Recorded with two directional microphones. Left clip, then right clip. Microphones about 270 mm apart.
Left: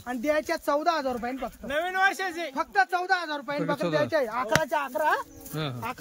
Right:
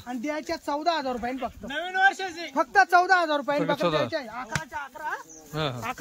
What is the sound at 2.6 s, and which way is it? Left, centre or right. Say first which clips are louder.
Speech: right 6 dB; centre.